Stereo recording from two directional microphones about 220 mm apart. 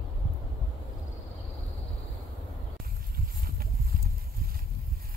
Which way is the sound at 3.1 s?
40° right (ahead or behind).